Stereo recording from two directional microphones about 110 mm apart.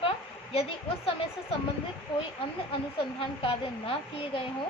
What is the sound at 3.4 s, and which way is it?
A woman's voice, 55° left (ahead or behind).